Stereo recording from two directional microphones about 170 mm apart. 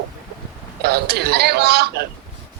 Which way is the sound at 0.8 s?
70° right (ahead or behind).